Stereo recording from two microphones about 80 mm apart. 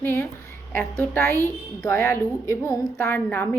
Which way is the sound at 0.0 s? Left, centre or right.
Left.